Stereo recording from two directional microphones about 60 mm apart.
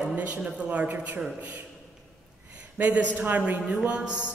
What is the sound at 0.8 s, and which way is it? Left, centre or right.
Speech, right.